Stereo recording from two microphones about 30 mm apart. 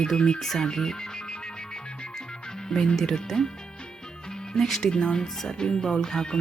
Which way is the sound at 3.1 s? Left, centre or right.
Centre.